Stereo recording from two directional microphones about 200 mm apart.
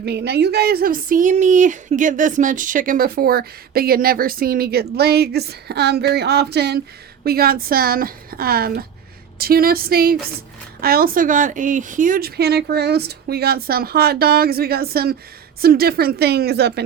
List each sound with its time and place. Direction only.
0.0 s speech: 55° right (ahead or behind)